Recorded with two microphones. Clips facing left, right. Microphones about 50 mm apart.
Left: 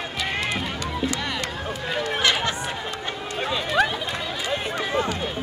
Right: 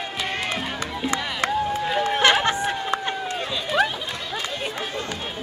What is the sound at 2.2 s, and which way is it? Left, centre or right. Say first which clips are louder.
Chatter: right 4 dB; right.